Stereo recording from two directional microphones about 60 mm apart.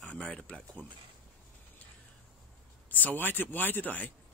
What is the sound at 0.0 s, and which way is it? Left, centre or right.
Speech, left.